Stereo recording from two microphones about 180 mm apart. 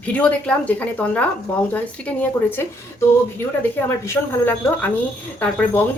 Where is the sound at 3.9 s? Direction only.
10° left (ahead or behind).